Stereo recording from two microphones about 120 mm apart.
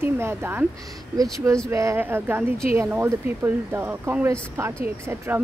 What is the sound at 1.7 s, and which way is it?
Speech, 25° right (ahead or behind).